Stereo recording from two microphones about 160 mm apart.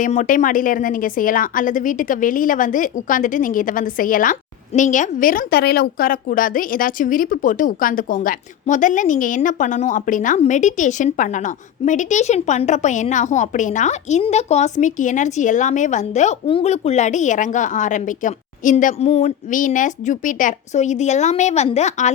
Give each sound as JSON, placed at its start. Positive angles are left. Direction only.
{"t": 0.0, "sound": "a woman's voice", "side_deg": 55}